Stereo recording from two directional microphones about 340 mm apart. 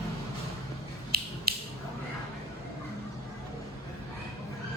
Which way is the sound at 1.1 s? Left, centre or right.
Right.